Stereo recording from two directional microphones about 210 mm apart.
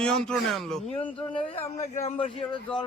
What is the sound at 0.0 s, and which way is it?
Speech, 5° left (ahead or behind).